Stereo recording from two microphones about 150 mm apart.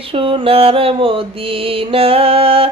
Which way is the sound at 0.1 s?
35° right (ahead or behind).